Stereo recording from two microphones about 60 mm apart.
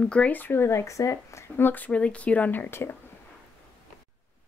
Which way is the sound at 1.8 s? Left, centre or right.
Left.